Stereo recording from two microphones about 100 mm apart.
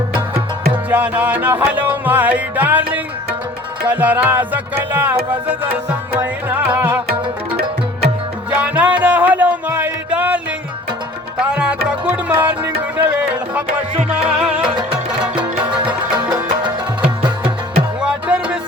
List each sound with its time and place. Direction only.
0.7 s music: 15° right (ahead or behind)
8.4 s music: 15° right (ahead or behind)
16.0 s music: 10° right (ahead or behind)
18.0 s music: 10° right (ahead or behind)